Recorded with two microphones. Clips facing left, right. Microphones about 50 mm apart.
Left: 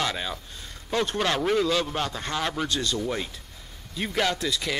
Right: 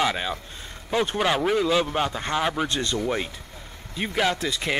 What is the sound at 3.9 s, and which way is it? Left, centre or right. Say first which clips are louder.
Speech: right 2 dB; centre.